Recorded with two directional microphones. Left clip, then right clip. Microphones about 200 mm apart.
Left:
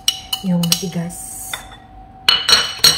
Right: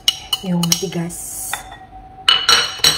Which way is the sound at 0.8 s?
55° right (ahead or behind).